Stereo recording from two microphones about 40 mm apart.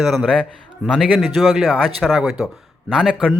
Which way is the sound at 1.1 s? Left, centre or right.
Centre.